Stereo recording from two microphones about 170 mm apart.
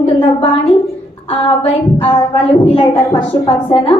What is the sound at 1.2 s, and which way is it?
Speech, 30° left (ahead or behind).